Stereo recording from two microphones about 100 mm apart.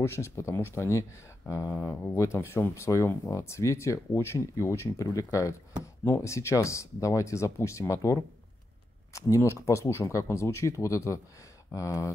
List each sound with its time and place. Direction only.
0.0 s speech: 30° left (ahead or behind)